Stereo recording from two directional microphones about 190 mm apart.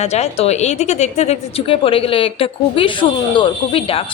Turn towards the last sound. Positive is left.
turn(degrees=30)  # may be behind; listen again after turning